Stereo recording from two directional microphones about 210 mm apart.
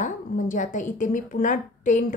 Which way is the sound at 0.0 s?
35° left (ahead or behind).